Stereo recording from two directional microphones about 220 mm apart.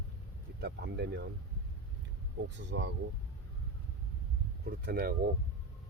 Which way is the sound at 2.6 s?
55° right (ahead or behind).